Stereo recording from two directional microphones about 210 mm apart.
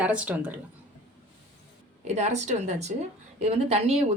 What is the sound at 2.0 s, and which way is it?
Speech, 30° right (ahead or behind).